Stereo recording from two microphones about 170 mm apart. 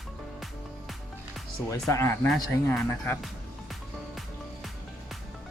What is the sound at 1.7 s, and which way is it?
Speech, 20° left (ahead or behind).